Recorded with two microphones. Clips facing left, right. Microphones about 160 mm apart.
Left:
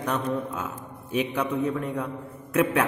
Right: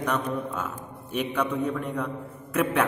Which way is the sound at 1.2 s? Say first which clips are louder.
Right 1 dB; 10° left (ahead or behind).